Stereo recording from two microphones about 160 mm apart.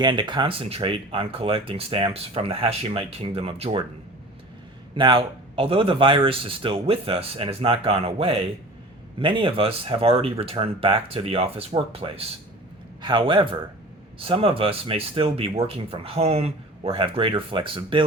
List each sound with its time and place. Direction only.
0.0 s speech: 30° right (ahead or behind)
4.9 s speech: 30° right (ahead or behind)